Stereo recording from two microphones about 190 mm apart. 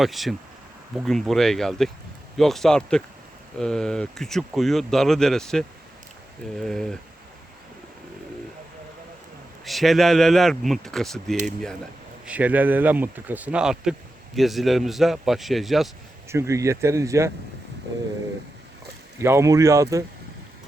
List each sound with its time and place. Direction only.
0.0 s speech: centre (ahead or behind)
9.6 s speech: centre (ahead or behind)
16.3 s speech: 15° right (ahead or behind)
19.2 s speech: 15° right (ahead or behind)